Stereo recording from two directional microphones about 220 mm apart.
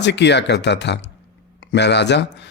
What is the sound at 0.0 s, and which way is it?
A man's voice, 50° left (ahead or behind).